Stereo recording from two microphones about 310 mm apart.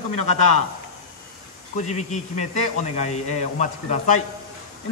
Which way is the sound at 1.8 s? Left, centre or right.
Left.